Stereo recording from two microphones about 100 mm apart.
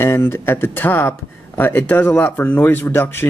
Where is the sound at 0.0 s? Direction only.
25° left (ahead or behind).